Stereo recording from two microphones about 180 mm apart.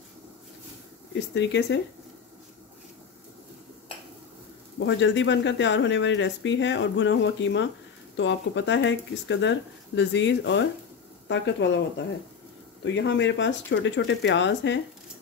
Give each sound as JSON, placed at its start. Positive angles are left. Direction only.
{"t": 1.3, "sound": "speech", "side_deg": 80}
{"t": 4.7, "sound": "speech", "side_deg": 90}
{"t": 12.8, "sound": "speech", "side_deg": 80}